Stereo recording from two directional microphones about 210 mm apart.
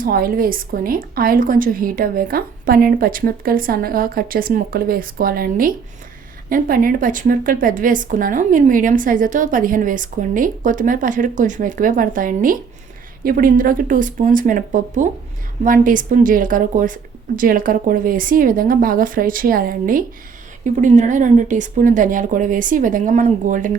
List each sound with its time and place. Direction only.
0.0 s a woman's voice: 45° right (ahead or behind)